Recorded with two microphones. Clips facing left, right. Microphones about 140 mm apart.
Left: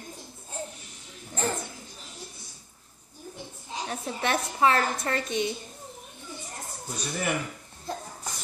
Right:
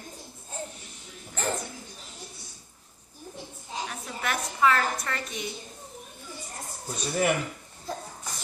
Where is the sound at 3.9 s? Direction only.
30° left (ahead or behind).